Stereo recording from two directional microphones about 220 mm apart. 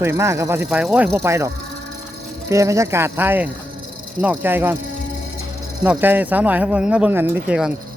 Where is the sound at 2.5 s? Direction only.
15° right (ahead or behind).